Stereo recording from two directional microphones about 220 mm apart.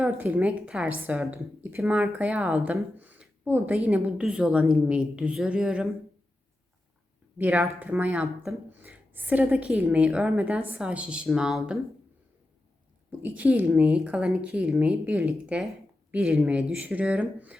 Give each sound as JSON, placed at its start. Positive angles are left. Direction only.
{"t": 0.0, "sound": "a woman's voice", "side_deg": -5}
{"t": 7.3, "sound": "a woman's voice", "side_deg": -5}
{"t": 13.1, "sound": "a woman's voice", "side_deg": -5}